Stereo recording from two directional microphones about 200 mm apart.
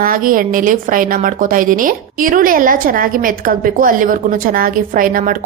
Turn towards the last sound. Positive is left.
turn(degrees=-45)  # may be behind; listen again after turning